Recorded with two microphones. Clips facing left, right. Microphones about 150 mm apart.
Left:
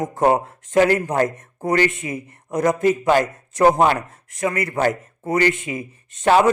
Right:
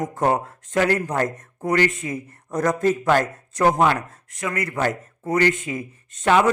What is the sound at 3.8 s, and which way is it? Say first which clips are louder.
A man's voice: left 2 dB; 30° left (ahead or behind).